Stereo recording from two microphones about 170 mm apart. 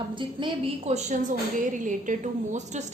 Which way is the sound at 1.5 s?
50° right (ahead or behind).